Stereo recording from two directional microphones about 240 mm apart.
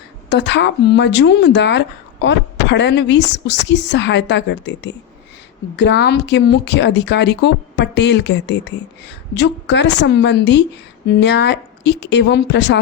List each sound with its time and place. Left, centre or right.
0.3 s speech: left